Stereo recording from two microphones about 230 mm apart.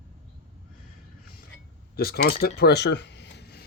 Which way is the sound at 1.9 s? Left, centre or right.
Left.